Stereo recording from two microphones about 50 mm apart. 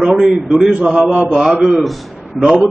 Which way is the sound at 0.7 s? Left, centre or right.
Right.